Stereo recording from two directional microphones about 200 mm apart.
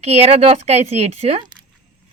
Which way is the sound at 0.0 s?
30° right (ahead or behind).